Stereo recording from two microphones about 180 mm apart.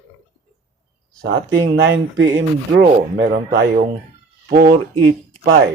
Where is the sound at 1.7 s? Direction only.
90° right.